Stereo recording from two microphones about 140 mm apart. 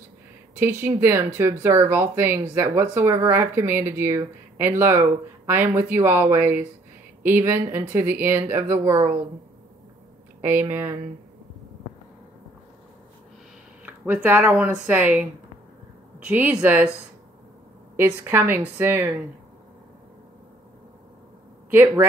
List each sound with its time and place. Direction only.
0.6 s speech: 15° right (ahead or behind)
10.4 s speech: 15° right (ahead or behind)
13.8 s speech: 10° right (ahead or behind)
16.3 s speech: 10° right (ahead or behind)
17.9 s speech: 15° right (ahead or behind)
21.6 s speech: 15° right (ahead or behind)